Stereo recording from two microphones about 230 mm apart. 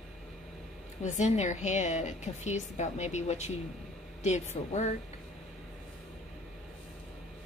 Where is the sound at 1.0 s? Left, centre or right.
Left.